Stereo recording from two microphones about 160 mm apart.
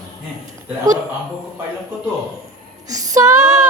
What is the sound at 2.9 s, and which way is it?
Female singing, 20° right (ahead or behind).